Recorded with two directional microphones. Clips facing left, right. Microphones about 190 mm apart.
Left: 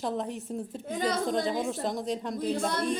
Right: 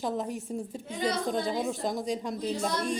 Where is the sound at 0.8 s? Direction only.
50° left (ahead or behind).